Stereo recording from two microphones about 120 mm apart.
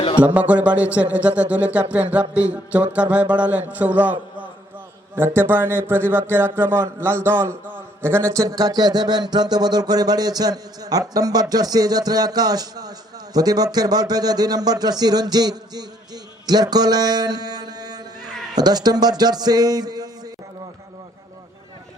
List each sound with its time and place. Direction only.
0.3 s a man's voice: 10° right (ahead or behind); by 20.3 s 30° right (ahead or behind)